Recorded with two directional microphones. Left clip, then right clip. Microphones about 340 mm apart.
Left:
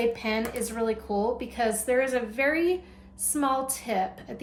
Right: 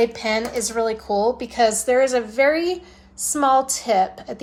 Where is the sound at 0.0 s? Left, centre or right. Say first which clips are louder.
Right 7 dB; right.